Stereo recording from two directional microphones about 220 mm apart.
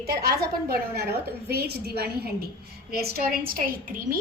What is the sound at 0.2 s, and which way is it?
A woman's voice, 45° right (ahead or behind).